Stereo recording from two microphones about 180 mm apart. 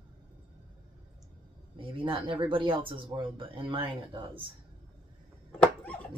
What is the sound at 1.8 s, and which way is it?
Speech, 30° right (ahead or behind).